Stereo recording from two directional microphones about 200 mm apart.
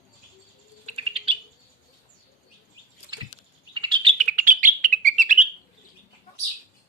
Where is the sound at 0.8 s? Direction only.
30° right (ahead or behind).